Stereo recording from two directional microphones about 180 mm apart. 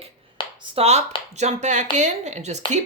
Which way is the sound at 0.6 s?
30° right (ahead or behind).